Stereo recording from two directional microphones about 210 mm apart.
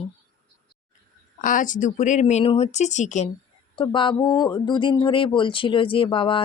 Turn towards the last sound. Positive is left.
turn(degrees=25)  # may be behind; listen again after turning